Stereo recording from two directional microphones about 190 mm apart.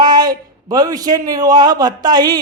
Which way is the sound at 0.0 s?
20° right (ahead or behind).